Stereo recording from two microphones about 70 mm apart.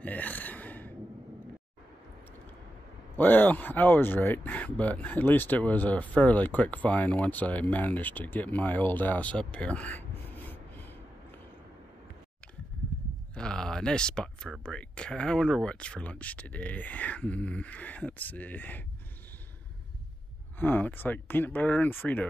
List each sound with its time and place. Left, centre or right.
0.0 s gasp: left
3.2 s speech: left
13.3 s a sound: centre
14.6 s speech: centre
20.5 s speech: left